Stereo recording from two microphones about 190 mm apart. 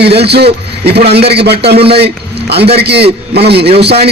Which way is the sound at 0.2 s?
60° right (ahead or behind).